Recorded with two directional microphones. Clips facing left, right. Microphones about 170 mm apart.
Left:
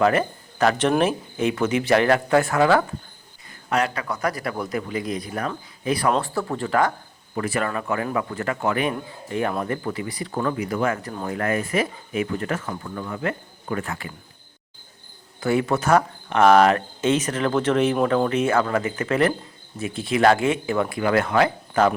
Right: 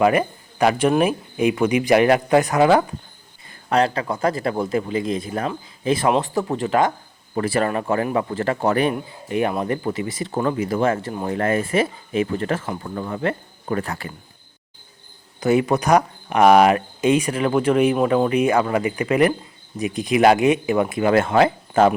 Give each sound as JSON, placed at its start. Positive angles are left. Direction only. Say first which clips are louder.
{"t": 0.0, "sound": "speech", "louder": "right 2 dB", "side_deg": -10}
{"t": 3.7, "sound": "speech", "louder": "right 4 dB", "side_deg": -30}
{"t": 7.3, "sound": "speech", "louder": "right 4 dB", "side_deg": -30}
{"t": 9.3, "sound": "speech", "louder": "right 3 dB", "side_deg": -15}
{"t": 15.4, "sound": "speech", "louder": "right 3 dB", "side_deg": -20}